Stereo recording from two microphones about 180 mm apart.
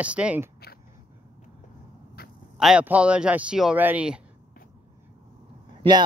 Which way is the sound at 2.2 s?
60° left (ahead or behind).